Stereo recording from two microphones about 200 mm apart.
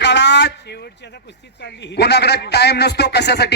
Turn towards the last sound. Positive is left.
turn(degrees=55)  # may be behind; listen again after turning